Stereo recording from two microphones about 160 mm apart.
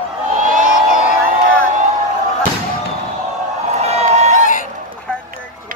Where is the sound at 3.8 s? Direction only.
45° right (ahead or behind).